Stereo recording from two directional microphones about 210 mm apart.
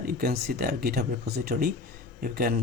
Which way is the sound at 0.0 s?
45° right (ahead or behind).